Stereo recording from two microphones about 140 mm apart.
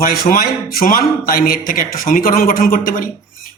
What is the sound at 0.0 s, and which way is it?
A man's voice, 90° left.